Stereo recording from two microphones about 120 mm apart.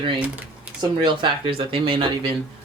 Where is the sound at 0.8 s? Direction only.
40° right (ahead or behind).